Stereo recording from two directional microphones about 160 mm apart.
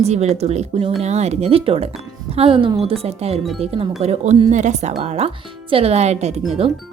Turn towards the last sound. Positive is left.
turn(degrees=-35)  # may be behind; listen again after turning